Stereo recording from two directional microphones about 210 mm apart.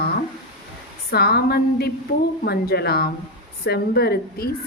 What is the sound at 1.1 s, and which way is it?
A woman's voice, 50° left (ahead or behind).